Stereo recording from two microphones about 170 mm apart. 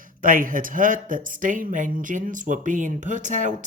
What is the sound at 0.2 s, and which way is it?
Speech, 55° right (ahead or behind).